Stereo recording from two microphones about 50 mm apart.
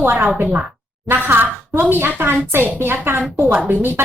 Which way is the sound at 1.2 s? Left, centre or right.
Right.